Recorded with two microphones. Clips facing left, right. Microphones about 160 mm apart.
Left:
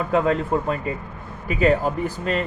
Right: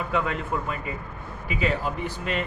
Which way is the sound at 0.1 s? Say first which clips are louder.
Left 8 dB; 35° left (ahead or behind).